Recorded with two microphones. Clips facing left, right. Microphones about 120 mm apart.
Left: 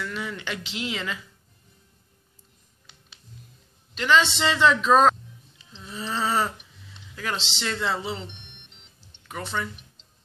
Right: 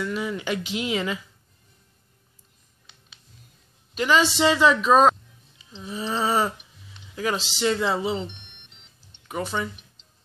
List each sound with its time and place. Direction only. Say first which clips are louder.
0.0 s speech: right 5 dB; 20° right (ahead or behind)
3.9 s speech: right 1 dB; 10° right (ahead or behind)
9.3 s speech: right 3 dB; 15° right (ahead or behind)